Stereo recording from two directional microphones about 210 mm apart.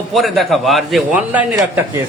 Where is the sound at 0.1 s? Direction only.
Centre (ahead or behind).